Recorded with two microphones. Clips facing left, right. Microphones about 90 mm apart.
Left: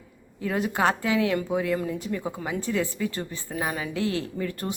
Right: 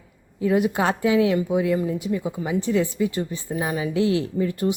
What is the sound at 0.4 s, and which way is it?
Speech, 20° right (ahead or behind).